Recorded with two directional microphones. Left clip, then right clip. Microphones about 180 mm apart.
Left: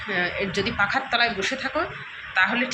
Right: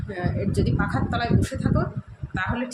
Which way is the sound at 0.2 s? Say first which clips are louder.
Left 2 dB; 10° right (ahead or behind).